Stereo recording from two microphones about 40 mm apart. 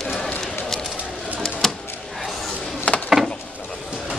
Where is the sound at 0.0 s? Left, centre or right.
Centre.